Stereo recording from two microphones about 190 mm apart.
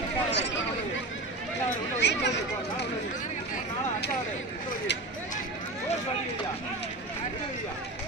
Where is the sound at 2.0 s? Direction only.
65° left (ahead or behind).